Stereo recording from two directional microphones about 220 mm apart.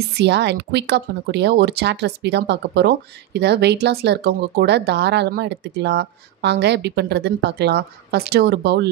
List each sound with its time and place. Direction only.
0.0 s speech: 50° right (ahead or behind)